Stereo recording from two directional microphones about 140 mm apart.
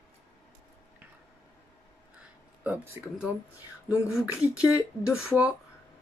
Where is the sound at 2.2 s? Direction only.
10° right (ahead or behind).